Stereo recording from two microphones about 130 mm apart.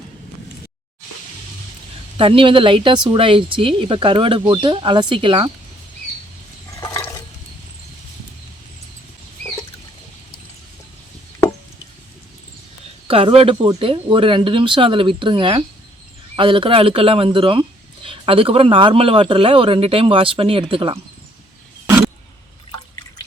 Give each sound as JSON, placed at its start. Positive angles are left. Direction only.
{"t": 2.1, "sound": "a woman's voice", "side_deg": -45}
{"t": 6.7, "sound": "toilet flush", "side_deg": 25}
{"t": 13.1, "sound": "a woman's voice", "side_deg": -45}